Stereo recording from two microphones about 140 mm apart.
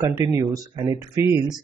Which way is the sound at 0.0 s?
25° right (ahead or behind).